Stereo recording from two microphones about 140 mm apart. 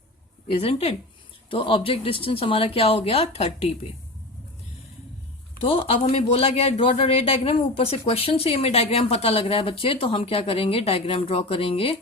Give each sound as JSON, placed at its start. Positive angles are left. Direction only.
{"t": 0.6, "sound": "a man's voice", "side_deg": 45}
{"t": 5.6, "sound": "a man's voice", "side_deg": 45}